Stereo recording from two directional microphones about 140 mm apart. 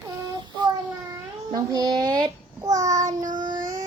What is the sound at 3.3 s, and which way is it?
Child singing, 35° right (ahead or behind).